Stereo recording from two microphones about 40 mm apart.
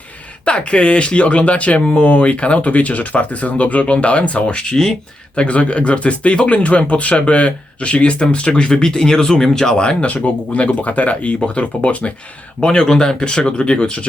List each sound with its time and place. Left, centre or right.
0.4 s speech: left
4.5 s speech: centre
5.3 s speech: left; by 9.7 s centre
9.7 s speech: left
10.1 s speech: left
12.5 s speech: left